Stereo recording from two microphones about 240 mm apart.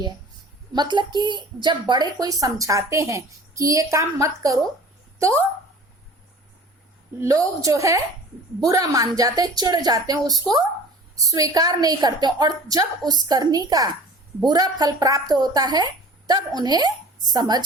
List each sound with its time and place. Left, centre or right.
0.7 s a woman's voice: centre
7.2 s a woman's voice: centre